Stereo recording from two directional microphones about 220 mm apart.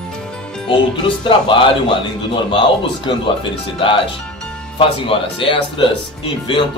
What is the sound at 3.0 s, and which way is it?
Speech, 20° left (ahead or behind).